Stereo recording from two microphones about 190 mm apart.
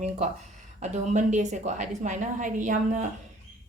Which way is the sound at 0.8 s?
35° right (ahead or behind).